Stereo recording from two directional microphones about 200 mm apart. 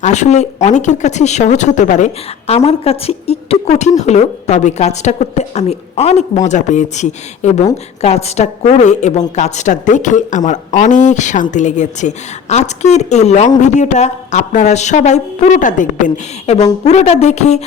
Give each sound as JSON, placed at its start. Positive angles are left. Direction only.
{"t": 0.0, "sound": "speech", "side_deg": 35}